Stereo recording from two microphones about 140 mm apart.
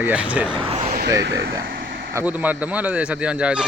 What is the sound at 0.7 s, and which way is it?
Vehicle, 45° right (ahead or behind).